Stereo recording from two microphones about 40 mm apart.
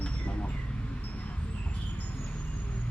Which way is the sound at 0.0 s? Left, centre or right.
Left.